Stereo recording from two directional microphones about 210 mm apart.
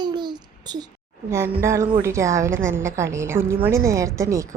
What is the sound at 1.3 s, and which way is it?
A woman's voice, 10° right (ahead or behind).